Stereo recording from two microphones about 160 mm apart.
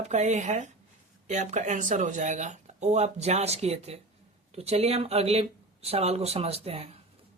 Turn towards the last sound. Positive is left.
turn(degrees=-40)  # may be behind; listen again after turning